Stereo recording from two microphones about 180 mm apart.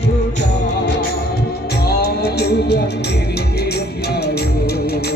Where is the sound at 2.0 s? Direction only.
65° left (ahead or behind).